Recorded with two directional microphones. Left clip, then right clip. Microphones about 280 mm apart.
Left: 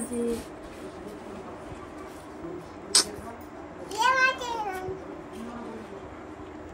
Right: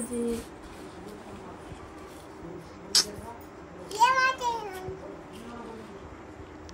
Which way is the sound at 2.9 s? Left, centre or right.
Centre.